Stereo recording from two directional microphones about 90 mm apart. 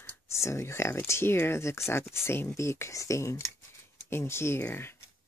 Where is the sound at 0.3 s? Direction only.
35° left (ahead or behind).